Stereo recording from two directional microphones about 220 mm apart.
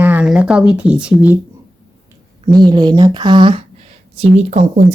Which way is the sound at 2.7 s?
20° right (ahead or behind).